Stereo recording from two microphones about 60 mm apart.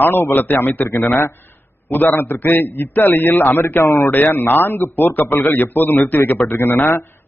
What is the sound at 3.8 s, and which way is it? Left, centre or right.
Speech, left.